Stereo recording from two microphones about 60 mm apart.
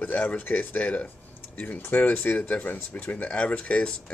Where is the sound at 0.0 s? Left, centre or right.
Left.